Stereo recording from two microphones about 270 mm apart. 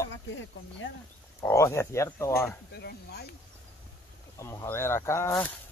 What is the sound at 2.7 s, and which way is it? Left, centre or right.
Speech, left.